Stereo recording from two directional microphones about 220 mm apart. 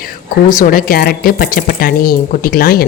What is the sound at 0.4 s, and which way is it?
Speech, 40° left (ahead or behind).